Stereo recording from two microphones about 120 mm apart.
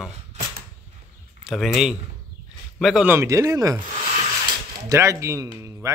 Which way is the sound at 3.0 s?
25° right (ahead or behind).